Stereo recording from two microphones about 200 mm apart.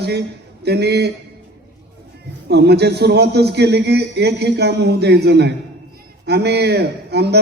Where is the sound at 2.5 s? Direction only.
55° right (ahead or behind).